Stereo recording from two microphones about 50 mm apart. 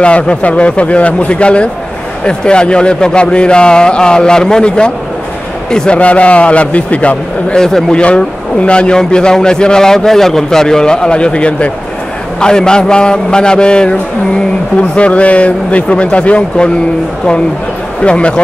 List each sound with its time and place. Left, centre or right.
0.0 s a man's voice: left
5.9 s a man's voice: left
7.5 s a man's voice: centre
8.0 s a man's voice: left
18.0 s a man's voice: left